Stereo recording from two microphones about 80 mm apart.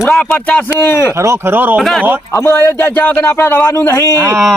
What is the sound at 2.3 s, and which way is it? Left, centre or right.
Speech, left.